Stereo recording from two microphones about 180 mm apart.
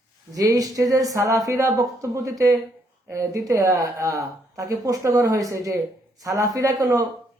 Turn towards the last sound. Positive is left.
turn(degrees=-20)  # may be behind; listen again after turning